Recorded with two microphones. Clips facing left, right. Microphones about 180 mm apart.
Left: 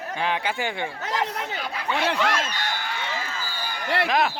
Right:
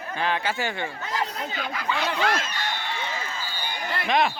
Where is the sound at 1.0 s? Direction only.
75° left (ahead or behind).